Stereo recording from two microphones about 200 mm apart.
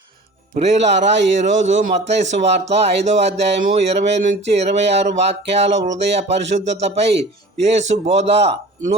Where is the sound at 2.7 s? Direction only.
30° right (ahead or behind).